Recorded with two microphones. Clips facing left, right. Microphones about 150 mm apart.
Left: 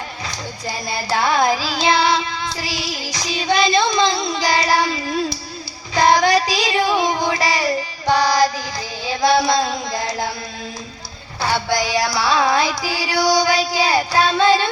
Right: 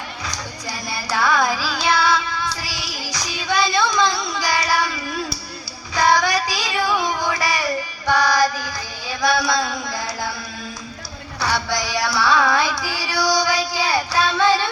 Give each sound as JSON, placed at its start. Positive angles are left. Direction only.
{"t": 0.7, "sound": "child singing", "side_deg": 20}
{"t": 5.9, "sound": "female singing", "side_deg": 20}
{"t": 11.3, "sound": "music", "side_deg": 20}